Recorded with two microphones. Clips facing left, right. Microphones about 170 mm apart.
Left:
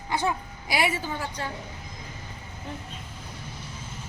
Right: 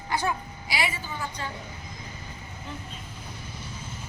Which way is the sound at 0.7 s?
50° left (ahead or behind).